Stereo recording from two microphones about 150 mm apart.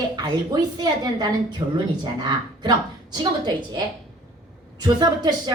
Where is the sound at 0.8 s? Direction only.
25° right (ahead or behind).